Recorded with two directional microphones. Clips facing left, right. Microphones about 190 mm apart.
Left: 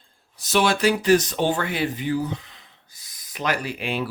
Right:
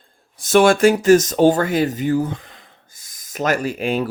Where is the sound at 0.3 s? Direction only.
50° right (ahead or behind).